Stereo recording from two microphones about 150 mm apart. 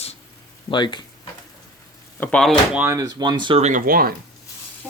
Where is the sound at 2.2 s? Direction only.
5° left (ahead or behind).